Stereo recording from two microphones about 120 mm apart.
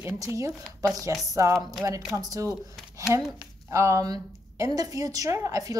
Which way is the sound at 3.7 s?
25° right (ahead or behind).